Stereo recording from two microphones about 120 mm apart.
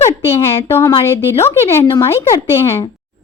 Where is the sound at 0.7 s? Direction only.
25° left (ahead or behind).